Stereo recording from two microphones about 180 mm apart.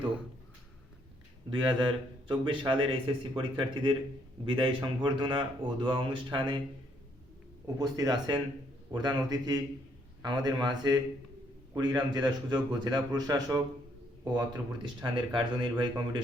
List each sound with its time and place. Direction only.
1.5 s a man's voice: 25° right (ahead or behind)
7.8 s a man's voice: 20° right (ahead or behind)